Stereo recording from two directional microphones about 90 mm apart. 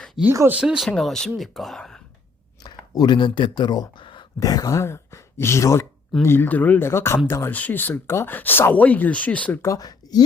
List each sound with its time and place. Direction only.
0.4 s speech: 15° right (ahead or behind)
0.9 s speech: 5° left (ahead or behind)
2.6 s speech: 50° left (ahead or behind)
4.4 s speech: 40° left (ahead or behind); by 9.6 s 15° left (ahead or behind)
9.6 s speech: 40° left (ahead or behind)